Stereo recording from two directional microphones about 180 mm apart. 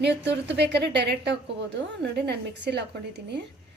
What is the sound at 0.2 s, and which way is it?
A woman's voice, 70° right (ahead or behind).